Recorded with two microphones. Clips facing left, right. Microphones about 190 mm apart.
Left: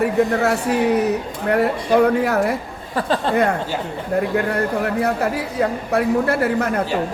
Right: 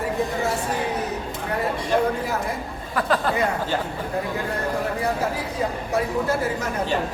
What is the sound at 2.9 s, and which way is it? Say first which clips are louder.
Speech: left 2 dB; 30° left (ahead or behind).